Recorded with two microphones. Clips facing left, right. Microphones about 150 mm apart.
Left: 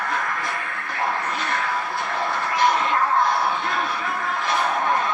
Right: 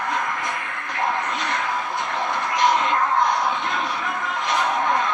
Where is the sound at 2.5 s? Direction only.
20° right (ahead or behind).